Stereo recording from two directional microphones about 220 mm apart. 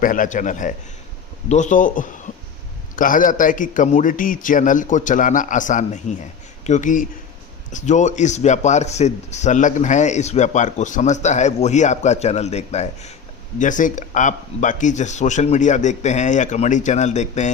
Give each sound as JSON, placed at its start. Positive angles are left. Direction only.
{"t": 0.0, "sound": "speech", "side_deg": 35}